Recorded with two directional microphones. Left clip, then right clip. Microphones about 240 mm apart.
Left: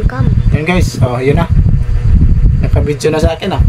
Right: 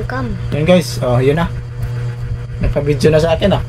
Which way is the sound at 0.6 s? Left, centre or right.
Centre.